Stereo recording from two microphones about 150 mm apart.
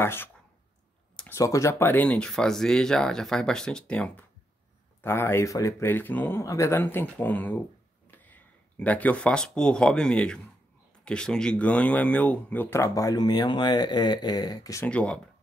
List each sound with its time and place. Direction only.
0.0 s speech: 15° left (ahead or behind)
1.1 s a sound: 10° left (ahead or behind)
1.4 s speech: 20° left (ahead or behind)
14.9 s speech: 10° left (ahead or behind)